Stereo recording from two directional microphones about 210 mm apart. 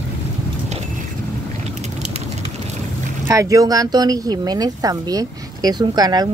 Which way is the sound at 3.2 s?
15° right (ahead or behind).